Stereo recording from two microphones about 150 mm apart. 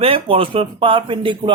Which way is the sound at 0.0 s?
40° right (ahead or behind).